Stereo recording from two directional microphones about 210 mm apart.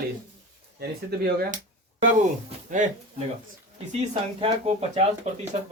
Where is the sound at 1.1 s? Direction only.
50° right (ahead or behind).